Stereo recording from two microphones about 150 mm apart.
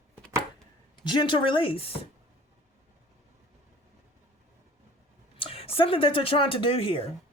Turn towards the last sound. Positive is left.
turn(degrees=40)  # may be behind; listen again after turning